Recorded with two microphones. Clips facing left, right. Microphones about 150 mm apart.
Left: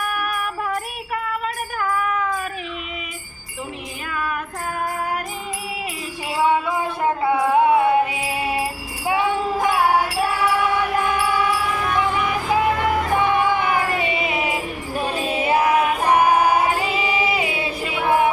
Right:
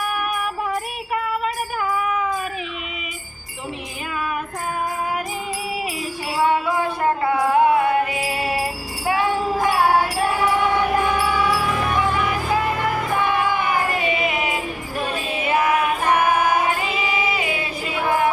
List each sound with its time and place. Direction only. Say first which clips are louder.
7.3 s music: left 1 dB; 20° left (ahead or behind)
9.0 s jingle bell: even; 20° left (ahead or behind)
13.1 s music: left 2 dB; 20° left (ahead or behind)
15.4 s music: left 2 dB; 35° left (ahead or behind)